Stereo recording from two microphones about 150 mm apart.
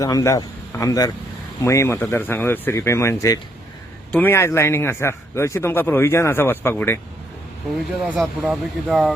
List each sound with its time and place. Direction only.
0.0 s a man's voice: 25° left (ahead or behind)
8.0 s speech: 5° right (ahead or behind)